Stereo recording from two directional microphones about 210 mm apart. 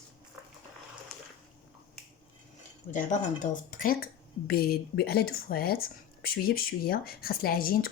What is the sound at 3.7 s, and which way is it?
Speech, 45° left (ahead or behind).